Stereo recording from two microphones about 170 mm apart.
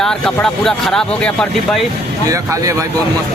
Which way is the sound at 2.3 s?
20° right (ahead or behind).